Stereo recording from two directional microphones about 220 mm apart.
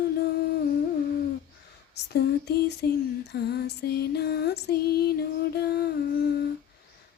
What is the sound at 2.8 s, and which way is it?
Female singing, 45° left (ahead or behind).